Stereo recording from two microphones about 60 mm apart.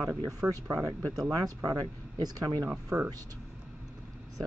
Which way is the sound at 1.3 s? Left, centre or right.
Right.